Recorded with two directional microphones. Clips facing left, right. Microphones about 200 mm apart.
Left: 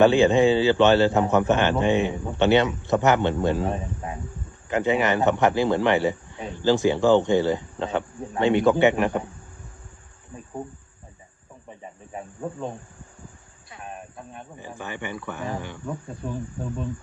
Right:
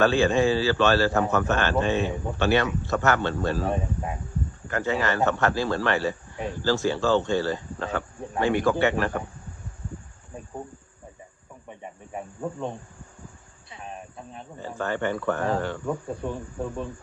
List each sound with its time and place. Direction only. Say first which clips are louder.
0.0 s a man's voice: left 4 dB; 20° left (ahead or behind)
4.7 s a man's voice: left 4 dB; 20° left (ahead or behind)
12.4 s speech: even; 5° left (ahead or behind)
14.6 s speech: right 7 dB; 15° left (ahead or behind)